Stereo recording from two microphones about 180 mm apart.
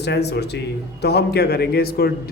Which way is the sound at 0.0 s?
70° left (ahead or behind).